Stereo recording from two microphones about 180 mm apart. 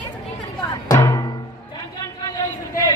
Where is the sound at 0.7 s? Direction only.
20° left (ahead or behind).